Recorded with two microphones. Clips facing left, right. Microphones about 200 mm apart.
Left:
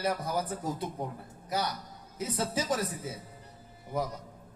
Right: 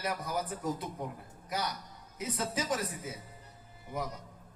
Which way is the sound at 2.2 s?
30° left (ahead or behind).